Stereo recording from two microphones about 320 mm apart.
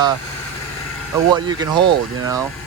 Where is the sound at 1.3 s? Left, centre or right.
Centre.